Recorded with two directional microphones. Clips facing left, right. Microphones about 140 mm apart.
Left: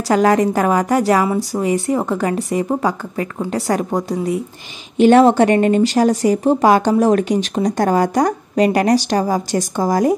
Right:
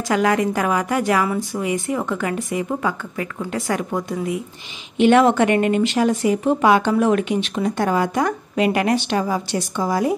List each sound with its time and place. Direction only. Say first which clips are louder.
0.1 s speech: left 5 dB; 40° left (ahead or behind)